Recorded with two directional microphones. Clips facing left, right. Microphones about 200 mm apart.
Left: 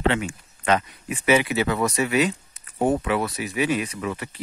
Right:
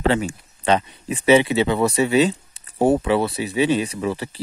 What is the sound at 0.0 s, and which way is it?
Speech, 35° right (ahead or behind).